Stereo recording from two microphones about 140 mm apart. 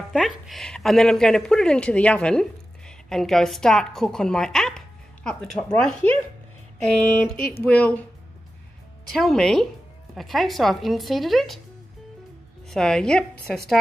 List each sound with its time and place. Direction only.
0.1 s a woman's voice: centre (ahead or behind)
6.9 s a sound: 5° left (ahead or behind)
9.1 s a woman's voice: centre (ahead or behind)
12.6 s a woman's voice: 5° left (ahead or behind)